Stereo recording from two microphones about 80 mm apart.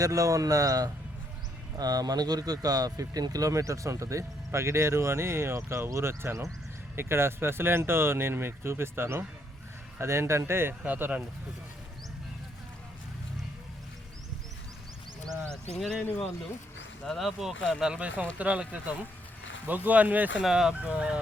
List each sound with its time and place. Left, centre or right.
0.0 s speech: right
15.7 s speech: centre
17.1 s speech: centre; by 20.3 s right
20.4 s speech: centre
20.7 s speech: centre